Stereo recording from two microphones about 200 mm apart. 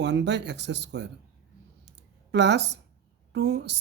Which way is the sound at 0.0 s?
60° right (ahead or behind).